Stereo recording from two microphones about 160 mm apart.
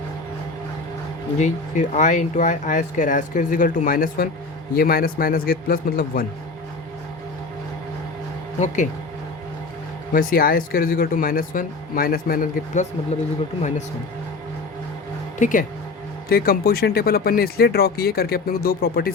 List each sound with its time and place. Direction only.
1.4 s speech: 50° left (ahead or behind)
8.5 s speech: 50° left (ahead or behind)
10.1 s speech: 60° left (ahead or behind)
15.4 s speech: 55° left (ahead or behind)
16.3 s speech: 70° left (ahead or behind)